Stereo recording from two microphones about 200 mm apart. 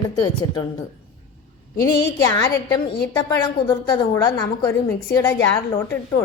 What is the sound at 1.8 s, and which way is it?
Speech, 15° left (ahead or behind).